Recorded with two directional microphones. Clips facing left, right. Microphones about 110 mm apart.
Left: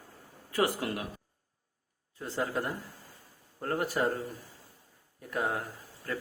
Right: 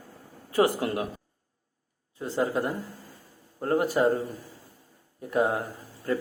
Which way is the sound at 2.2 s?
20° right (ahead or behind).